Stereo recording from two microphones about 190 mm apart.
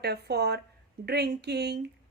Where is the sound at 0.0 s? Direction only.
60° right (ahead or behind).